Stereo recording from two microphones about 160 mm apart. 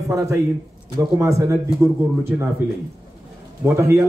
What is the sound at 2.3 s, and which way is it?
Speech, 5° right (ahead or behind).